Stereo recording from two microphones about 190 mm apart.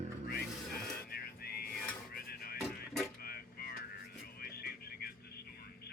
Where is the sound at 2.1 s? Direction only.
50° left (ahead or behind).